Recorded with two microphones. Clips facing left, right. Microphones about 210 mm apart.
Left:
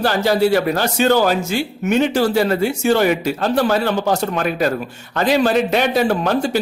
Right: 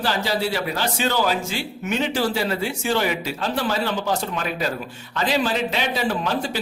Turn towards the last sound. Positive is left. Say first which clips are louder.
# left 7 dB
turn(degrees=50)  # may be behind; listen again after turning